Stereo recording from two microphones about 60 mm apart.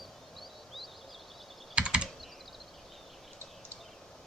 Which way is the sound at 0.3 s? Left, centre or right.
Centre.